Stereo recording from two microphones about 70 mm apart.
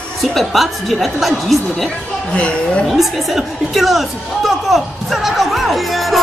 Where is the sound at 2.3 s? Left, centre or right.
Centre.